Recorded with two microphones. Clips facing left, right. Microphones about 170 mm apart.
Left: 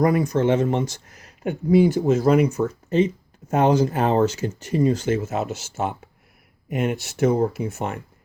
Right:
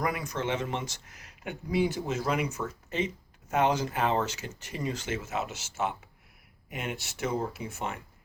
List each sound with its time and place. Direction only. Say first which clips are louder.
0.0 s speech: left 12 dB; 40° left (ahead or behind)